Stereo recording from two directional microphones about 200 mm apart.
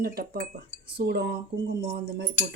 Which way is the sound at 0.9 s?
55° right (ahead or behind).